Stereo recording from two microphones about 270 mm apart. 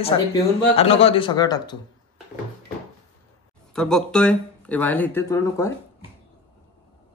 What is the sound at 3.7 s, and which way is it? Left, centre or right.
Speech, centre.